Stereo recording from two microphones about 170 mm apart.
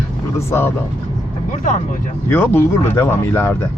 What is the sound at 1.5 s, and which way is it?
Speech, 50° left (ahead or behind).